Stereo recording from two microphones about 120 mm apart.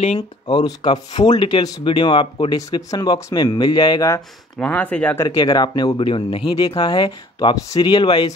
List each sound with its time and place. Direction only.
0.5 s speech: 35° left (ahead or behind)
4.6 s speech: 15° left (ahead or behind)
5.2 s speech: 30° left (ahead or behind)